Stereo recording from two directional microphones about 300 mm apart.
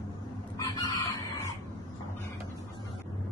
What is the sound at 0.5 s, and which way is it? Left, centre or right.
Chicken, centre.